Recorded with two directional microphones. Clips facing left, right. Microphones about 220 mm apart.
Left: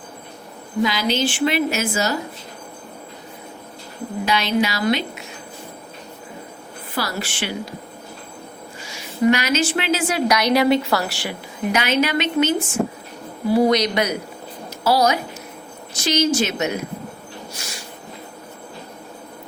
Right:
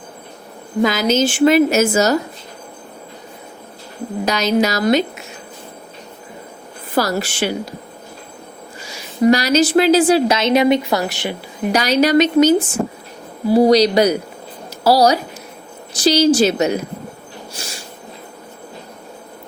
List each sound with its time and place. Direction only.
0.8 s a woman's voice: 45° right (ahead or behind)
4.3 s a woman's voice: 40° right (ahead or behind)
6.9 s a woman's voice: 40° right (ahead or behind)
9.2 s a woman's voice: 35° right (ahead or behind); by 11.3 s 20° right (ahead or behind)
11.7 s a woman's voice: 35° right (ahead or behind)
17.6 s a sound: 30° right (ahead or behind)